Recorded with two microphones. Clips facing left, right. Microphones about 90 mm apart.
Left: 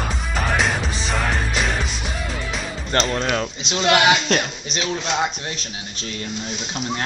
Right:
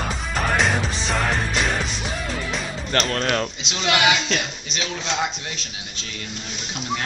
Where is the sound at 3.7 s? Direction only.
35° left (ahead or behind).